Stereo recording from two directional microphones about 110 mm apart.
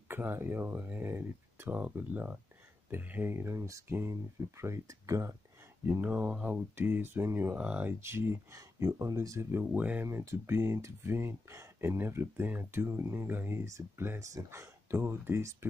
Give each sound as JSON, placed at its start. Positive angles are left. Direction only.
{"t": 0.1, "sound": "speech", "side_deg": -20}
{"t": 5.9, "sound": "speech", "side_deg": -15}
{"t": 10.0, "sound": "speech", "side_deg": -25}